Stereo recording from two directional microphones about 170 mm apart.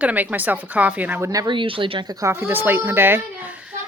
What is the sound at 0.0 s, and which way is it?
A woman's voice, 10° right (ahead or behind).